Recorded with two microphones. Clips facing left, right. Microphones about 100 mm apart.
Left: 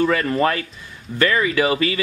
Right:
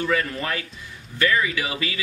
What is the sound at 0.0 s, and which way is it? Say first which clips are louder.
Speech: left 7 dB; 50° left (ahead or behind).